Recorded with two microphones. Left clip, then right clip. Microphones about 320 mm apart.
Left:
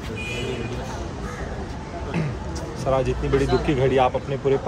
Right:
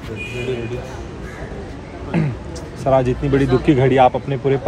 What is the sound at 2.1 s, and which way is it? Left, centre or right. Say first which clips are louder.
Speech: right 8 dB; centre.